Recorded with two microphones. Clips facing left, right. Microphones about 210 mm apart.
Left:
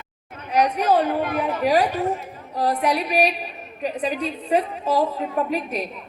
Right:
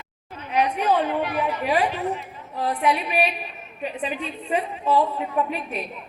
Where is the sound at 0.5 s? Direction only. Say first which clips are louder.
Left 2 dB; 40° left (ahead or behind).